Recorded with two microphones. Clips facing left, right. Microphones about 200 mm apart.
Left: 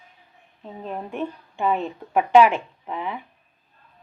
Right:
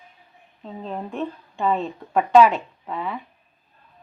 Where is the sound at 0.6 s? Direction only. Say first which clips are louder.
Right 1 dB; 10° left (ahead or behind).